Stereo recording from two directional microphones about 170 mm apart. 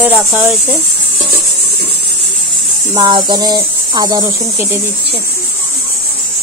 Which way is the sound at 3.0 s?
25° right (ahead or behind).